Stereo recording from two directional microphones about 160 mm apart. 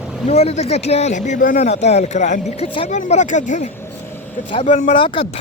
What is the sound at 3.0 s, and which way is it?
Speech, 50° left (ahead or behind).